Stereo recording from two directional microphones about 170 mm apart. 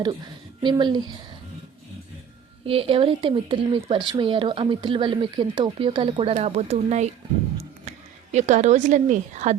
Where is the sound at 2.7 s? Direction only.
30° right (ahead or behind).